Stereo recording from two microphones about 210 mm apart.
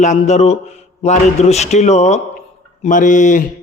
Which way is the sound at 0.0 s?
35° left (ahead or behind).